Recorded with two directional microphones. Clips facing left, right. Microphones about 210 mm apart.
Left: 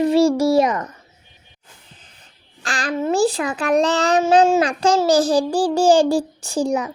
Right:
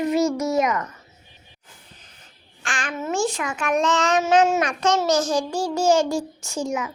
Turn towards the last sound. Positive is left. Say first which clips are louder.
# left 6 dB
turn(degrees=35)  # may be behind; listen again after turning